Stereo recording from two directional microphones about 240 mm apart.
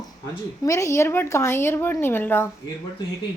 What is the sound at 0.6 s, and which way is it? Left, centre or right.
A woman's voice, centre.